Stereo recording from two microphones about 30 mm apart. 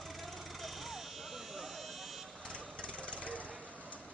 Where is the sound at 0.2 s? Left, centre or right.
Centre.